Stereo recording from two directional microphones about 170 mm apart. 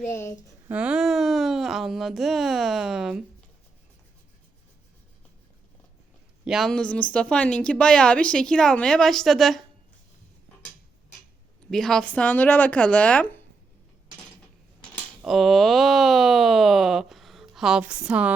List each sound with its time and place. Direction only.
0.1 s speech: 15° left (ahead or behind)
0.7 s a woman's voice: 5° right (ahead or behind)
6.4 s a woman's voice: centre (ahead or behind)
11.7 s speech: 5° left (ahead or behind)
15.2 s a woman's voice: centre (ahead or behind)